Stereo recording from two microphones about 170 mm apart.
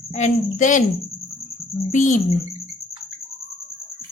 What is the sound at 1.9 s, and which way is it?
Speech, 45° left (ahead or behind).